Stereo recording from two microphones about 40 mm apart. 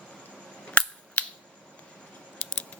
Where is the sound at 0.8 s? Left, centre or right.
Left.